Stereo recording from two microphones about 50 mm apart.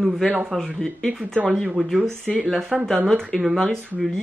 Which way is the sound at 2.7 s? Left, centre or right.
Centre.